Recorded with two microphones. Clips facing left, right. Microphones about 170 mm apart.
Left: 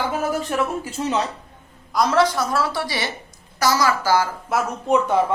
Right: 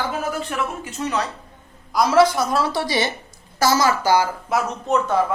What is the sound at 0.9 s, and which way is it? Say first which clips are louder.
Speech: left 2 dB; 30° left (ahead or behind).